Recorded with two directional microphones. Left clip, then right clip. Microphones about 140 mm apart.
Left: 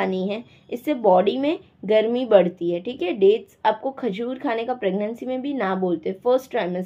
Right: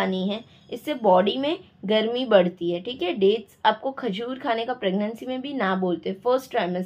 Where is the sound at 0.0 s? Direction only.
20° left (ahead or behind).